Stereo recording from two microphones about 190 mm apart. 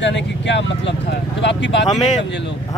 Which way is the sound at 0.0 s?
70° left (ahead or behind).